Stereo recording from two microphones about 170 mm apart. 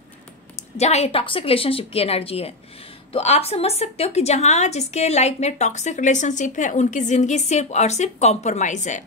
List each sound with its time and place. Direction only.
0.7 s a woman's voice: 40° left (ahead or behind)